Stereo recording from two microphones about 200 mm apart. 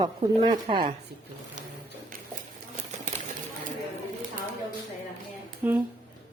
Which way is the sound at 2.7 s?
35° right (ahead or behind).